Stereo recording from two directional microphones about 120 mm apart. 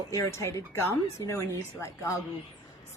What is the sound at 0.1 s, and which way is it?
A woman's voice, 25° left (ahead or behind).